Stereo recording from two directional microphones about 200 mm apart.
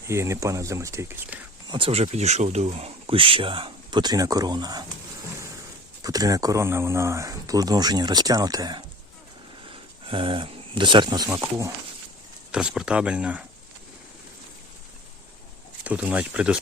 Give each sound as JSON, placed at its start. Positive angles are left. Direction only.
{"t": 0.1, "sound": "speech", "side_deg": -15}
{"t": 1.7, "sound": "speech", "side_deg": -30}
{"t": 6.0, "sound": "speech", "side_deg": -20}
{"t": 10.1, "sound": "speech", "side_deg": -25}
{"t": 11.3, "sound": "speech", "side_deg": -10}
{"t": 15.8, "sound": "speech", "side_deg": -5}